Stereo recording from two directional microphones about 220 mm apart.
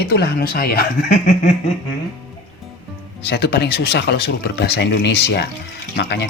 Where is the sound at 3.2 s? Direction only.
50° left (ahead or behind).